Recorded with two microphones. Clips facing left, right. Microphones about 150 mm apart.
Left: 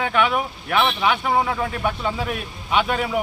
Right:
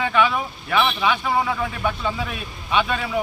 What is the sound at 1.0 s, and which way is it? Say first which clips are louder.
Speech: left 1 dB; 20° left (ahead or behind).